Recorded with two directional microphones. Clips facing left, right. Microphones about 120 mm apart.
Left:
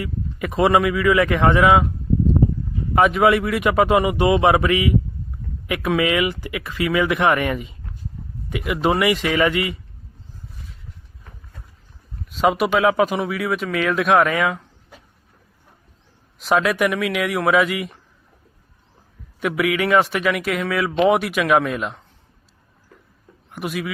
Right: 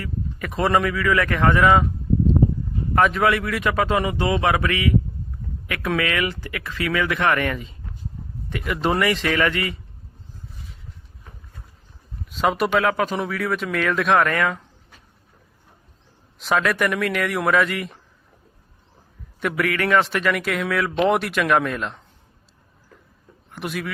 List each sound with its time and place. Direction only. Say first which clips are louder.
0.0 s speech: left 3 dB; 15° left (ahead or behind)
2.9 s a man's voice: left 2 dB; 10° left (ahead or behind)
3.2 s a man's voice: left 4 dB; 20° left (ahead or behind)
12.3 s a man's voice: left 2 dB; centre (ahead or behind)
16.4 s a man's voice: left 3 dB; 5° left (ahead or behind)
19.4 s a man's voice: left 2 dB; 5° left (ahead or behind)
23.5 s speech: left 2 dB; 5° left (ahead or behind)